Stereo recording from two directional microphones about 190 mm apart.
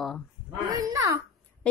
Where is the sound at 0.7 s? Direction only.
20° right (ahead or behind).